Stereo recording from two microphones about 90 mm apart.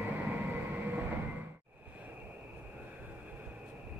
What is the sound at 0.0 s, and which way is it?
Train, 20° right (ahead or behind).